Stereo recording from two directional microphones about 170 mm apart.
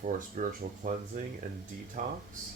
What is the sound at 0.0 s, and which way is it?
Speech, 50° right (ahead or behind).